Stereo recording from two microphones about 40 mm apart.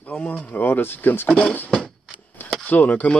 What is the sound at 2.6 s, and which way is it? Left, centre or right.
Speech, left.